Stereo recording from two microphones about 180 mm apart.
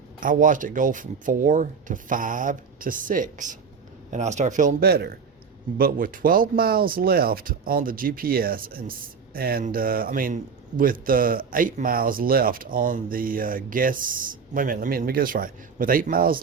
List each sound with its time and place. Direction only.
0.2 s speech: 45° right (ahead or behind)
4.8 s a man's voice: 60° right (ahead or behind)